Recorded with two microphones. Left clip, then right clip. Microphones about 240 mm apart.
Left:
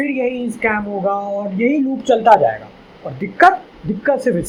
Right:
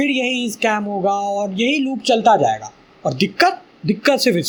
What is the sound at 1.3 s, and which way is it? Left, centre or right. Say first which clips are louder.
Speech: left 1 dB; right.